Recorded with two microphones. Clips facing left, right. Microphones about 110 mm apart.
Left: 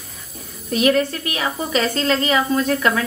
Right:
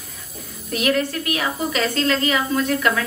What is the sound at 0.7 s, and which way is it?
A woman's voice, 30° left (ahead or behind).